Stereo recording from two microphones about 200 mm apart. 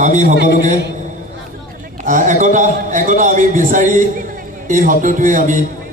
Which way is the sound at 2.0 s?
40° right (ahead or behind).